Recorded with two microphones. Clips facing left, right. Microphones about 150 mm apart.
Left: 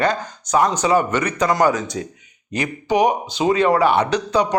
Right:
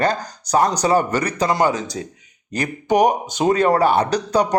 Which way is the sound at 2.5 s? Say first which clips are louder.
Right 1 dB; 40° right (ahead or behind).